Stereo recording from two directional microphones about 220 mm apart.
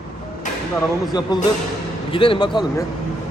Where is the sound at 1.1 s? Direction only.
20° left (ahead or behind).